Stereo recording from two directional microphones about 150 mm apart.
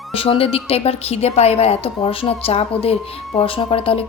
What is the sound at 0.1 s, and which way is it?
Speech, 40° left (ahead or behind).